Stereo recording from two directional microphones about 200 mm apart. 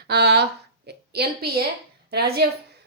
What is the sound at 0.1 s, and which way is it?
A woman's voice, 55° right (ahead or behind).